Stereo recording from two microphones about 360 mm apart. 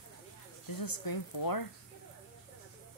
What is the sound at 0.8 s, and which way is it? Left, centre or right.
Speech, left.